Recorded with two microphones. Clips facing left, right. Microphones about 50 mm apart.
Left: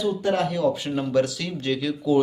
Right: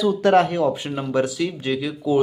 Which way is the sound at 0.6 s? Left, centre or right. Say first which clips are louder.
Right 1 dB; right.